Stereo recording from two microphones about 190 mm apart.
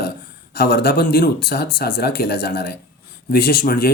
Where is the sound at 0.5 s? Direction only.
55° left (ahead or behind).